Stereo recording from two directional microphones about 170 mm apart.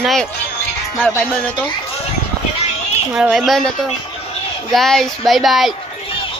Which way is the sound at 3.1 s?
5° right (ahead or behind).